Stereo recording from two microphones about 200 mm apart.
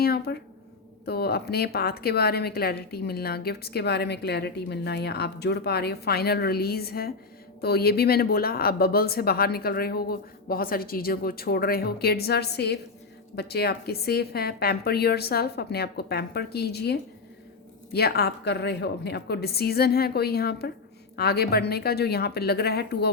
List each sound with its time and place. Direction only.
0.0 s a woman's voice: 50° left (ahead or behind)